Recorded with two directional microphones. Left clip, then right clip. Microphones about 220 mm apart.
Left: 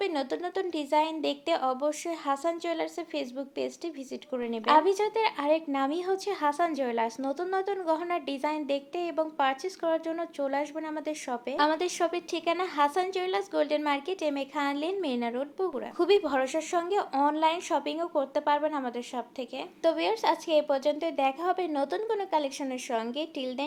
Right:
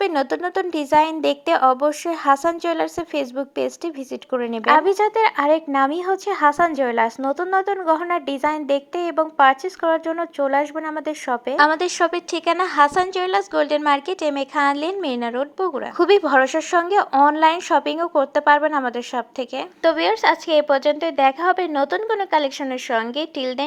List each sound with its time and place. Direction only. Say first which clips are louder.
0.0 s a woman's voice: right 10 dB; 20° right (ahead or behind)
19.8 s speech: right 9 dB; 10° right (ahead or behind)